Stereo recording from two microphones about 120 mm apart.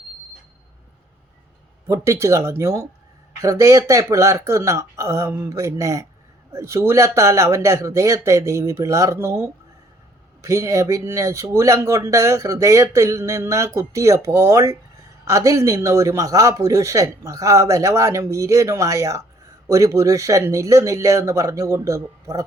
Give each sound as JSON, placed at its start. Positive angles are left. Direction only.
{"t": 1.9, "sound": "speech", "side_deg": -25}